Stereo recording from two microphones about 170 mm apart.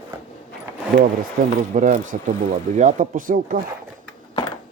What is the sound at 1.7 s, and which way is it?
Speech, 50° right (ahead or behind).